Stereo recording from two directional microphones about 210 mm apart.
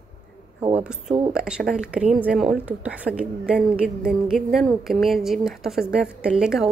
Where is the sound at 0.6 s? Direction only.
30° right (ahead or behind).